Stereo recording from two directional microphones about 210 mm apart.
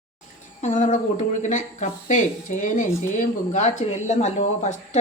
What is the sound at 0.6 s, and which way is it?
Speech, 35° left (ahead or behind).